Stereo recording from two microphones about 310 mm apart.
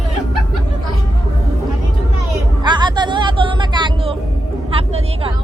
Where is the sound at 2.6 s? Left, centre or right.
Centre.